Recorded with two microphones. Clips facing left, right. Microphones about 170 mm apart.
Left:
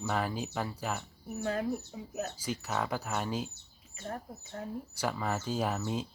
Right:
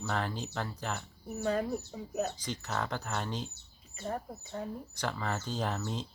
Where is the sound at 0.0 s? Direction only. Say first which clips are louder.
Left 2 dB; 10° left (ahead or behind).